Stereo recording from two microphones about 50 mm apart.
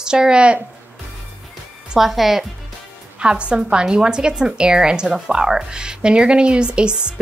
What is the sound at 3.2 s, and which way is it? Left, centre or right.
A woman's voice, right.